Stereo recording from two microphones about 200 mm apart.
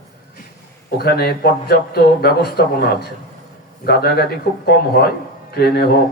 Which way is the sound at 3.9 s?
50° left (ahead or behind).